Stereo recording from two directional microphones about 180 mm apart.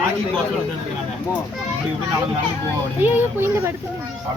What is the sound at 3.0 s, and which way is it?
Speech, 10° right (ahead or behind).